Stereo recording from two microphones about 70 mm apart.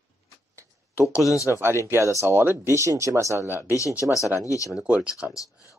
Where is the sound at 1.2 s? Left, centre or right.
Left.